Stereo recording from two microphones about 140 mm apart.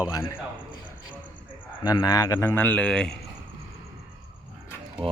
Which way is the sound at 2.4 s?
15° left (ahead or behind).